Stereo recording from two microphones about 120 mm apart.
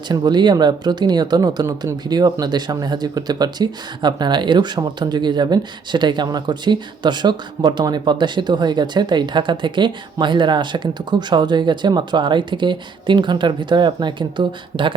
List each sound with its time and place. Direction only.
0.1 s speech: 35° right (ahead or behind)